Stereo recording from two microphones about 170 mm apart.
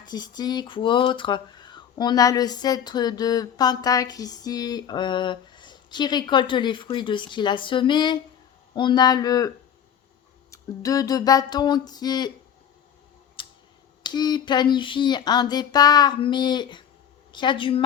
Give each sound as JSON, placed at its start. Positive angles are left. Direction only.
{"t": 0.0, "sound": "speech", "side_deg": 25}
{"t": 10.5, "sound": "speech", "side_deg": 20}
{"t": 13.4, "sound": "a sound", "side_deg": 30}
{"t": 14.0, "sound": "speech", "side_deg": 25}